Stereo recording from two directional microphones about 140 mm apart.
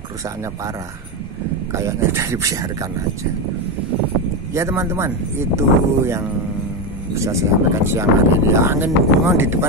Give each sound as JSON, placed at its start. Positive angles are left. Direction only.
{"t": 1.7, "sound": "speech", "side_deg": -20}
{"t": 4.6, "sound": "speech", "side_deg": -20}